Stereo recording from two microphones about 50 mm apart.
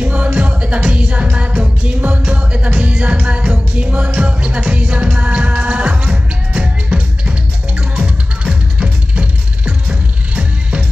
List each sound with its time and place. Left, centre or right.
0.0 s music: right